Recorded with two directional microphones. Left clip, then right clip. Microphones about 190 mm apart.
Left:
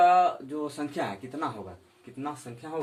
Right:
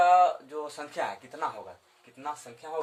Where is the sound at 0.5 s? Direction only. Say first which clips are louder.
Left 2 dB; 25° right (ahead or behind).